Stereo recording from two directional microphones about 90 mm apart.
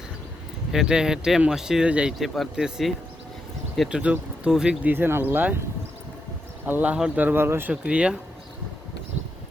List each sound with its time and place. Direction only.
0.7 s speech: 5° right (ahead or behind)
4.8 s speech: 20° right (ahead or behind)
6.7 s speech: 20° right (ahead or behind)
7.7 s speech: 10° right (ahead or behind)